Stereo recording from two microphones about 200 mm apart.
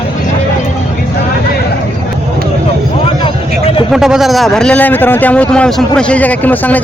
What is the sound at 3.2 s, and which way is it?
Vehicle, 25° left (ahead or behind).